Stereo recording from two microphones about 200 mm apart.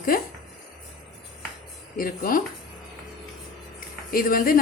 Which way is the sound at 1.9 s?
45° left (ahead or behind).